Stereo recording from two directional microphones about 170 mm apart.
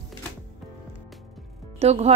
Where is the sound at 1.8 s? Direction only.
40° right (ahead or behind).